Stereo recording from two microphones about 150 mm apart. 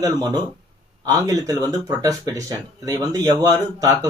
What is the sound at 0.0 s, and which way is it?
Speech, 30° right (ahead or behind).